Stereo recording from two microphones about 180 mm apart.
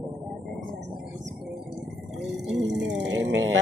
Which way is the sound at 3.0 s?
90° right.